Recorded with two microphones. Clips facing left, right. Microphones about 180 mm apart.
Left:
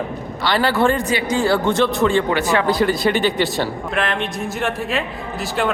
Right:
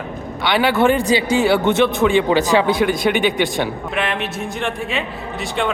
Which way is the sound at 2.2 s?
15° right (ahead or behind).